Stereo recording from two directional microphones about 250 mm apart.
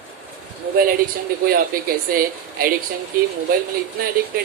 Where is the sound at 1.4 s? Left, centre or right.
Right.